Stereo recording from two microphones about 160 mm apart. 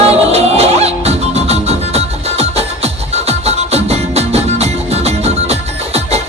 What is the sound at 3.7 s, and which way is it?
Music, 40° right (ahead or behind).